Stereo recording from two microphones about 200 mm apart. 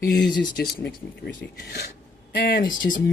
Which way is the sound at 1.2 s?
50° left (ahead or behind).